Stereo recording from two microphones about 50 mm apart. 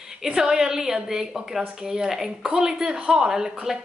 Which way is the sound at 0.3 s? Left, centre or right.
Centre.